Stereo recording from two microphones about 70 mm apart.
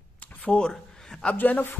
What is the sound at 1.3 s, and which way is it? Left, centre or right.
Speech, left.